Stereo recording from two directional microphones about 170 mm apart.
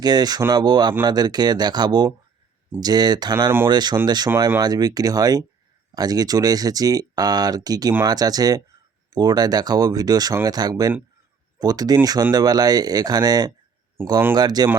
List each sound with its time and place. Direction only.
0.0 s speech: 25° right (ahead or behind)
14.3 s speech: 25° right (ahead or behind)